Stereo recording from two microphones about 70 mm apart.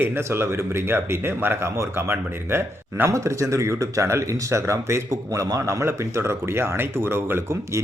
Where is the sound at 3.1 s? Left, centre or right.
Right.